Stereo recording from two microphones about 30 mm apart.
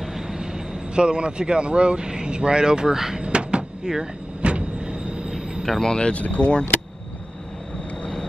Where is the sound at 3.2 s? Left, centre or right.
Right.